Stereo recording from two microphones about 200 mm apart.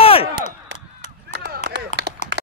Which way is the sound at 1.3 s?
55° right (ahead or behind).